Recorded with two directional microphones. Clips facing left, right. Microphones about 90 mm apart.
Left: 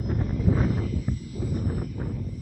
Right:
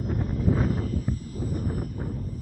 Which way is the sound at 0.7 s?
40° right (ahead or behind).